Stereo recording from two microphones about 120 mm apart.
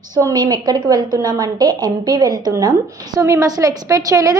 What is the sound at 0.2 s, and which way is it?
A woman's voice, 30° right (ahead or behind).